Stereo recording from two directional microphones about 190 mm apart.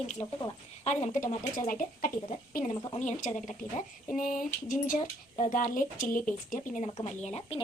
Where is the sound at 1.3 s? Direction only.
45° left (ahead or behind).